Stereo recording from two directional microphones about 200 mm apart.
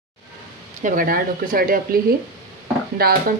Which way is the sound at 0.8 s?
40° right (ahead or behind).